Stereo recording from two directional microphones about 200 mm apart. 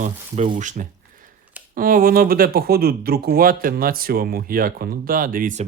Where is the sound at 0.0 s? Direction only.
40° right (ahead or behind).